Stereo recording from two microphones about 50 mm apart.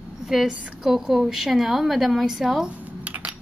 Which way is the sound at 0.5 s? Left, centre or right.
Right.